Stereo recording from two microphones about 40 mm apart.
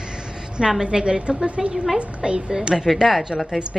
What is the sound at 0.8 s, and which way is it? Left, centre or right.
A woman's voice, right.